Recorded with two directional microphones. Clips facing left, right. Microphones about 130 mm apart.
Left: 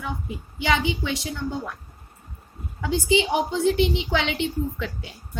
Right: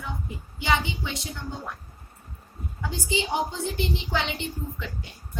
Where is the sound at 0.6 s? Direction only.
90° left.